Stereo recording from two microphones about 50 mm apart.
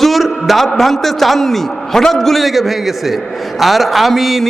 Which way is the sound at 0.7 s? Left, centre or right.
Centre.